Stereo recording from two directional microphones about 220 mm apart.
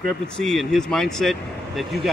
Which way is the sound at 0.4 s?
Centre (ahead or behind).